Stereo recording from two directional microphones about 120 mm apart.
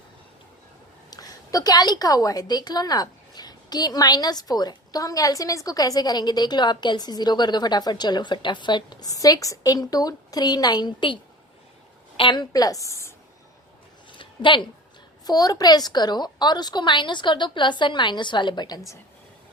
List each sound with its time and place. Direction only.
1.1 s a woman's voice: 30° left (ahead or behind)
14.2 s a sound: 40° left (ahead or behind)
15.3 s a woman's voice: 30° left (ahead or behind)